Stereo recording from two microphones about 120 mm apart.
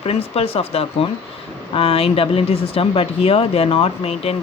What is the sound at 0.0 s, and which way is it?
Speech, 55° left (ahead or behind).